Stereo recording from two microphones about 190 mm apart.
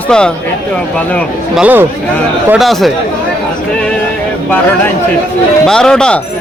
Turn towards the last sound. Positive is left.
turn(degrees=5)  # may be behind; listen again after turning